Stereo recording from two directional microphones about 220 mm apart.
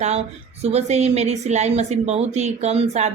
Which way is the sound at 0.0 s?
30° right (ahead or behind).